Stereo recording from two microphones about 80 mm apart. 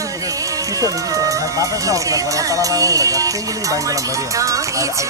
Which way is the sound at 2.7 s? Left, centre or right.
Right.